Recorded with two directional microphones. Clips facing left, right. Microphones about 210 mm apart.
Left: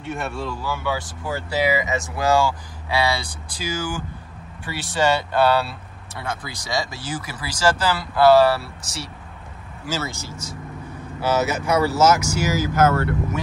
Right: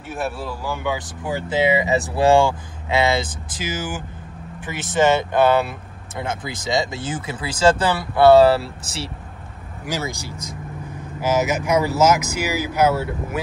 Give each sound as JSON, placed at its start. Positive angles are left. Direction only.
{"t": 0.0, "sound": "speech", "side_deg": 0}
{"t": 0.7, "sound": "speech", "side_deg": -15}
{"t": 9.8, "sound": "speech", "side_deg": -15}